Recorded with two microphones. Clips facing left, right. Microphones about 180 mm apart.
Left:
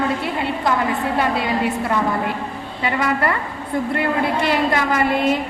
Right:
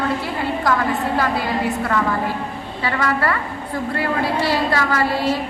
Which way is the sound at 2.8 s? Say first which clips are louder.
Left 1 dB; 20° left (ahead or behind).